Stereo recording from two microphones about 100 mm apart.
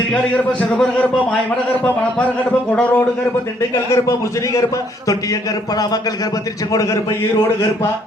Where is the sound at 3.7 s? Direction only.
30° left (ahead or behind).